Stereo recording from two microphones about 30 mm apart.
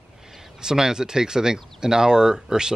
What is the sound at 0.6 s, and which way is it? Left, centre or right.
Speech, centre.